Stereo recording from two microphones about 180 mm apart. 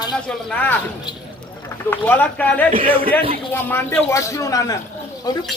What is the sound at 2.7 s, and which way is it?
Speech, 30° right (ahead or behind).